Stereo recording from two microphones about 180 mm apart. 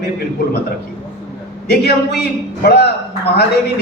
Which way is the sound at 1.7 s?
65° left (ahead or behind).